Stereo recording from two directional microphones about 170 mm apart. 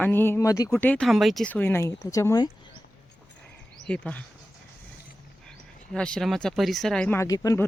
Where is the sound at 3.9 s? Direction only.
10° left (ahead or behind).